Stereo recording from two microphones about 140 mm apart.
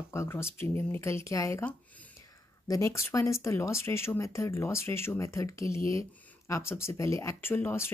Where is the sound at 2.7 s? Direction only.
20° left (ahead or behind).